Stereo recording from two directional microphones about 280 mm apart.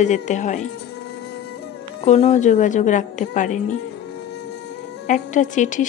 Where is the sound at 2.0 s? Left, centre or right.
Left.